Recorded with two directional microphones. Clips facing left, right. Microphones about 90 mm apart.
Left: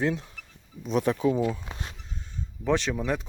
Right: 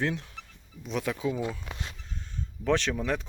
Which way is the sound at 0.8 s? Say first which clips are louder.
Left 6 dB; 40° left (ahead or behind).